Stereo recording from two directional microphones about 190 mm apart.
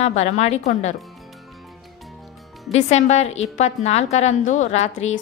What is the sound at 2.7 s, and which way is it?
A woman's voice, 35° left (ahead or behind).